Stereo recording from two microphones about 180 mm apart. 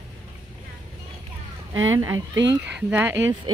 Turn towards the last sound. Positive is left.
turn(degrees=-10)  # may be behind; listen again after turning